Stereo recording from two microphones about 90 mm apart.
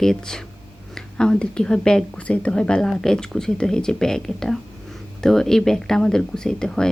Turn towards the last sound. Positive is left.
turn(degrees=5)  # may be behind; listen again after turning